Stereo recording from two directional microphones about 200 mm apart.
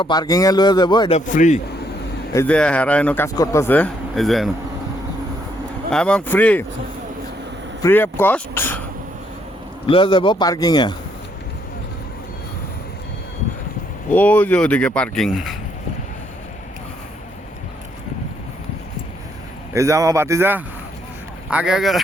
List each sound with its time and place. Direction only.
0.0 s a man's voice: 20° left (ahead or behind)
1.2 s a man's voice: 40° left (ahead or behind)
2.3 s speech: 10° left (ahead or behind)
5.9 s speech: 5° left (ahead or behind)
7.8 s speech: 10° left (ahead or behind)
9.8 s a man's voice: 25° left (ahead or behind)
14.1 s speech: 10° left (ahead or behind)
19.7 s a man's voice: 15° right (ahead or behind)